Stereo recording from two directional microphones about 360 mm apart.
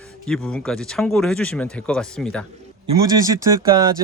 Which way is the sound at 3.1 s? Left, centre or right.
Centre.